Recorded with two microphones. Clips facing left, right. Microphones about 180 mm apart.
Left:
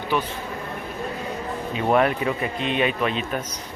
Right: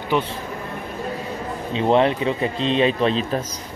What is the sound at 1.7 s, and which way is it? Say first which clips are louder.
Speech: right 3 dB; 25° right (ahead or behind).